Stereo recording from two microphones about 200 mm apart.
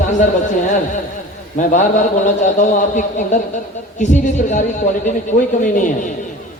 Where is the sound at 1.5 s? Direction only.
40° left (ahead or behind).